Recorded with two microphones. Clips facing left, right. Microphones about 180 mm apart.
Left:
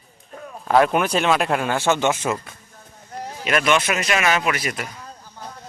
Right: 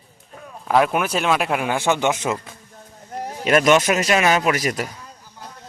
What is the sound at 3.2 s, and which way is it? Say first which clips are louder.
A man's voice: right 5 dB; 40° right (ahead or behind).